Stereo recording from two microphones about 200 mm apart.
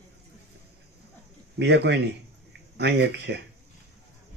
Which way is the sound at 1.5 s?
60° right (ahead or behind).